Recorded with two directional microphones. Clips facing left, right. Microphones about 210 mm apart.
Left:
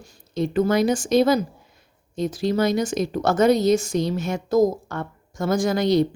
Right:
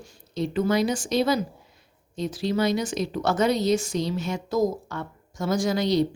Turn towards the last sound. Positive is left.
turn(degrees=50)  # may be behind; listen again after turning